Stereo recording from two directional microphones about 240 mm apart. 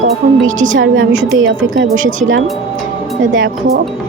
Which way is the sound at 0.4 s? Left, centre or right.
Right.